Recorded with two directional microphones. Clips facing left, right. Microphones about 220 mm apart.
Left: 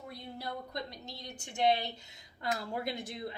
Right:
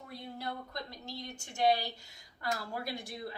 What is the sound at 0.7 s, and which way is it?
A woman's voice, 20° left (ahead or behind).